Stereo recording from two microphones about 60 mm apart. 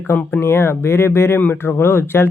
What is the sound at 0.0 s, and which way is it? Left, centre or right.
Speech, left.